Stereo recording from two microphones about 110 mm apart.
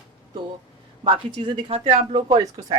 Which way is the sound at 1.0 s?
50° right (ahead or behind).